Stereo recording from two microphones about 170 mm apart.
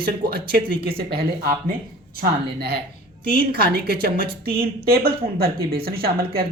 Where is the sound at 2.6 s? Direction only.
65° right (ahead or behind).